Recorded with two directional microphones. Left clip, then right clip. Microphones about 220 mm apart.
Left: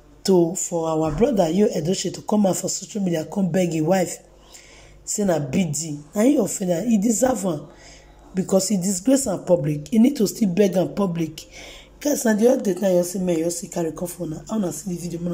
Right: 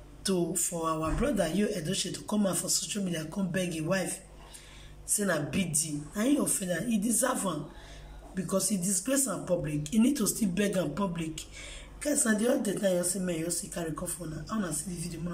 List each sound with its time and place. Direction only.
0.2 s a woman's voice: 30° left (ahead or behind)